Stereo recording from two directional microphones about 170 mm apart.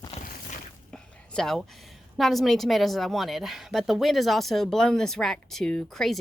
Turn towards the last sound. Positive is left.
turn(degrees=0)  # may be behind; listen again after turning